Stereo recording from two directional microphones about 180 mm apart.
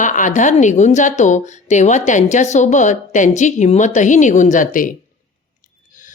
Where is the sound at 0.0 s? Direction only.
45° left (ahead or behind).